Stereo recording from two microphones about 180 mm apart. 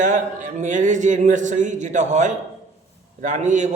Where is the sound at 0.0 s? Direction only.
45° right (ahead or behind).